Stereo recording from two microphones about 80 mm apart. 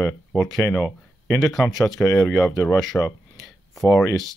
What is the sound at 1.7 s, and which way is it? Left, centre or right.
Speech, centre.